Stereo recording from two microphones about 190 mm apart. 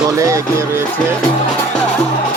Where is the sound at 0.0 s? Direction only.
15° right (ahead or behind).